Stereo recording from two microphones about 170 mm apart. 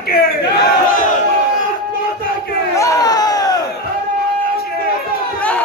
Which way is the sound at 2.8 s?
20° left (ahead or behind).